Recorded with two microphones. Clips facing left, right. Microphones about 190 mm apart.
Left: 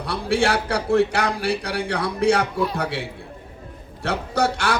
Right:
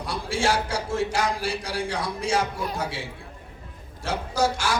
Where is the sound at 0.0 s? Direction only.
65° left (ahead or behind).